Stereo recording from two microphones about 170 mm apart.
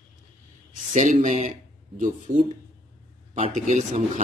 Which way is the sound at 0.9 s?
45° right (ahead or behind).